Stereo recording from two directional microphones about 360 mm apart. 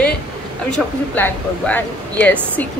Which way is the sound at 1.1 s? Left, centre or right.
Centre.